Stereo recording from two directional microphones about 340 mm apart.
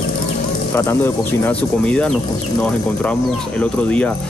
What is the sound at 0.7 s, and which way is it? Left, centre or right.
Speech, centre.